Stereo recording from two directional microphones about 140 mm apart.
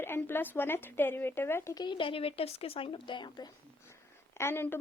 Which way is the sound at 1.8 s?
35° left (ahead or behind).